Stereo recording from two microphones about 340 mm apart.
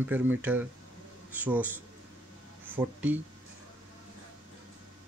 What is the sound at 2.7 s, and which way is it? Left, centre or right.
Speech, centre.